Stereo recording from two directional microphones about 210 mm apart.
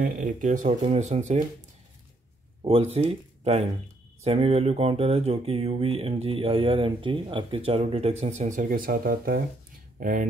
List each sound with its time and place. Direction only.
0.0 s speech: 40° right (ahead or behind)
2.6 s speech: 30° right (ahead or behind)